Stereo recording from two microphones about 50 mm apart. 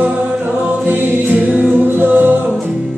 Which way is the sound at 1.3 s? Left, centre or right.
Right.